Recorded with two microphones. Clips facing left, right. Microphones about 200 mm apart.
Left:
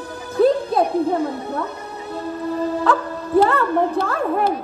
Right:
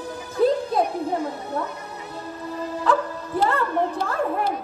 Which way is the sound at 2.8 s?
60° left (ahead or behind).